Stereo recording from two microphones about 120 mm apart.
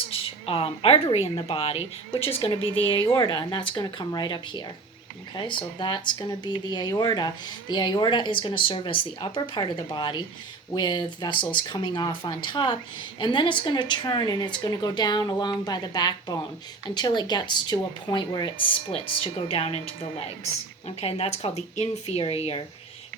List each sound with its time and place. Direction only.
0.1 s a sound: 50° left (ahead or behind)
1.4 s speech: 50° left (ahead or behind); by 22.2 s 65° left (ahead or behind)
22.2 s speech: 55° left (ahead or behind)